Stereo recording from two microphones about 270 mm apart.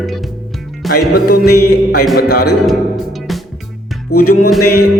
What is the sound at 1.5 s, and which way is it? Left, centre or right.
Music, left.